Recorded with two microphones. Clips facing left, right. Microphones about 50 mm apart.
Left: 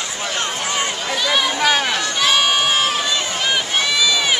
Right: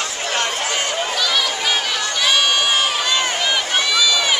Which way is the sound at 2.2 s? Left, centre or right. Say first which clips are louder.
Even; centre.